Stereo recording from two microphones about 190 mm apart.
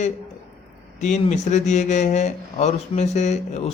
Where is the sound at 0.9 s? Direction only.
40° left (ahead or behind).